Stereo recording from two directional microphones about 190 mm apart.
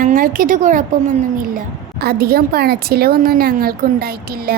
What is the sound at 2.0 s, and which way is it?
Speech, 55° right (ahead or behind).